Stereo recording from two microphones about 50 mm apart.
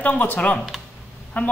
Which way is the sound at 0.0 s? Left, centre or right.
Left.